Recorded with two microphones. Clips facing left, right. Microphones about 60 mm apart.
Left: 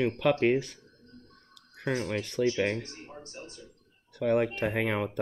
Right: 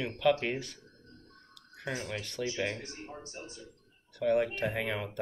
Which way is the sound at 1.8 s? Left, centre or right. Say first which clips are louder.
Left 6 dB; left.